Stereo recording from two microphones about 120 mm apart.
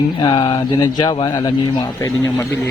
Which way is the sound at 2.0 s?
20° left (ahead or behind).